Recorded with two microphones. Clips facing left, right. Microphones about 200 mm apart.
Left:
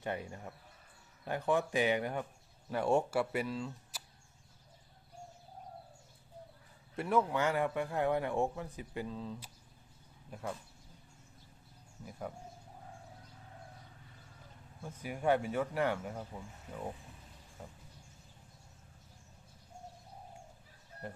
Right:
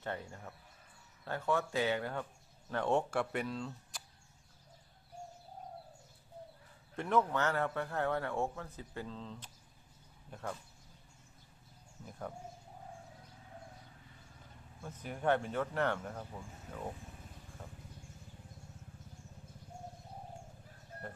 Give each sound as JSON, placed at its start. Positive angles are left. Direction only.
{"t": 0.0, "sound": "a man's voice", "side_deg": 15}
{"t": 6.9, "sound": "a man's voice", "side_deg": 10}
{"t": 14.8, "sound": "a man's voice", "side_deg": 10}
{"t": 17.6, "sound": "vehicle", "side_deg": 10}